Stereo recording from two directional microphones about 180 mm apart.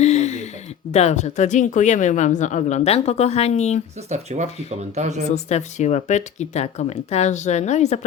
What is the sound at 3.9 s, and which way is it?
Speech, 40° right (ahead or behind).